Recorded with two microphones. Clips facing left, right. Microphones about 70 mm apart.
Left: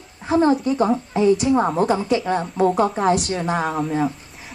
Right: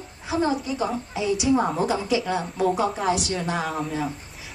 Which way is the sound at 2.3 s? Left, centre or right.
Left.